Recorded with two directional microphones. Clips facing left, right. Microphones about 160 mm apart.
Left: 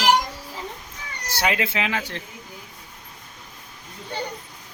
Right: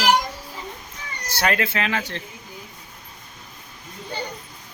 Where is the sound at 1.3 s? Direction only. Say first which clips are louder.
Right 1 dB; 15° left (ahead or behind).